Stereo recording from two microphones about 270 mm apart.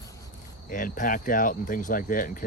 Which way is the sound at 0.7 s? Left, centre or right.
Left.